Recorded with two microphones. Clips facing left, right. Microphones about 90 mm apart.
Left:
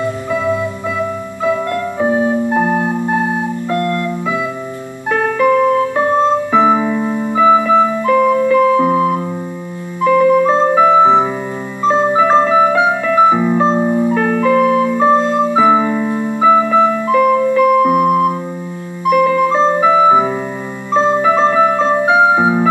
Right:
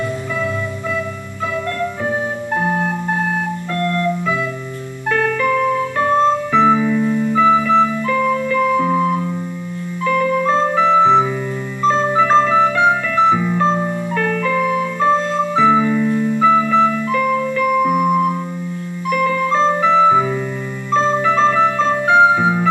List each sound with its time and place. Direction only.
2.0 s music: 20° left (ahead or behind)
3.7 s music: 20° left (ahead or behind)
5.1 s music: 25° left (ahead or behind)
13.4 s music: 25° left (ahead or behind)
15.5 s keyboard: 20° left (ahead or behind)
16.4 s music: 25° left (ahead or behind)
17.9 s music: 50° left (ahead or behind)
19.0 s music: 20° left (ahead or behind)